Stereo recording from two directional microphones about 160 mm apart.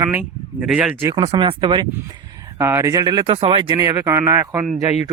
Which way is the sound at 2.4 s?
15° right (ahead or behind).